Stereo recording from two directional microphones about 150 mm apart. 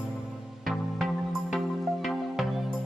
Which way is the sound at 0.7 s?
Centre (ahead or behind).